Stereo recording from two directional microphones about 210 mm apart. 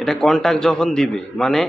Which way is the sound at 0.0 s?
Centre (ahead or behind).